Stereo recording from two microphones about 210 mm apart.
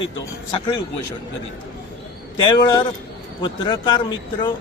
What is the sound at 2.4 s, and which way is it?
A man's voice, 20° left (ahead or behind).